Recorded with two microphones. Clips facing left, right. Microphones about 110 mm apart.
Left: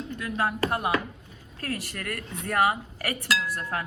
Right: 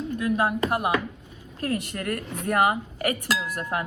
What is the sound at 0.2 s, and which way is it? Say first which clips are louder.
Speech: right 4 dB; 20° right (ahead or behind).